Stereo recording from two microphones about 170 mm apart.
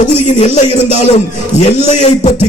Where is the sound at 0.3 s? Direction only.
40° left (ahead or behind).